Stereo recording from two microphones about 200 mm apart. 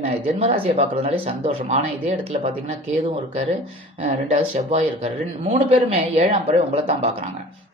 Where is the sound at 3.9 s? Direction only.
35° right (ahead or behind).